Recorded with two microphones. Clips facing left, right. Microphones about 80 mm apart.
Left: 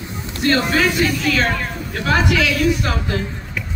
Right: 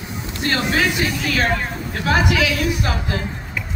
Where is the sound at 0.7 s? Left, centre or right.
Centre.